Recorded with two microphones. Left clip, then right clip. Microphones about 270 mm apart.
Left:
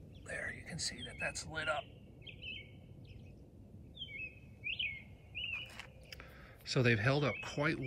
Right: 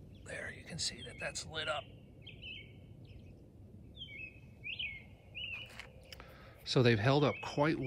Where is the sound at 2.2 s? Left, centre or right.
Right.